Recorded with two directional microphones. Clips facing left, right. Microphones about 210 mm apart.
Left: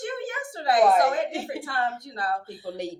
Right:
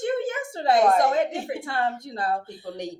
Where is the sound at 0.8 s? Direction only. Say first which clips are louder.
Even; 5° left (ahead or behind).